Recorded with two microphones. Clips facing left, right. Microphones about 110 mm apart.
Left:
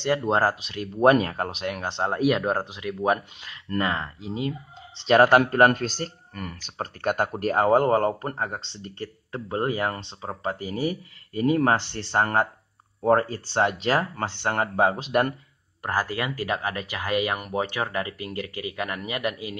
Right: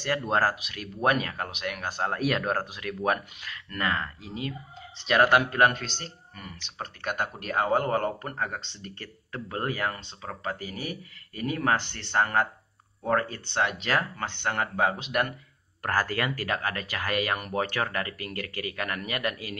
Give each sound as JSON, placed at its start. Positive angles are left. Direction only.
{"t": 0.0, "sound": "speech", "side_deg": 25}
{"t": 5.4, "sound": "speech", "side_deg": 45}
{"t": 15.8, "sound": "speech", "side_deg": 15}